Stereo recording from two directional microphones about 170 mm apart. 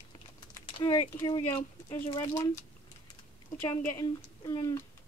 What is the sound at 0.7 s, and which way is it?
Speech, 30° left (ahead or behind).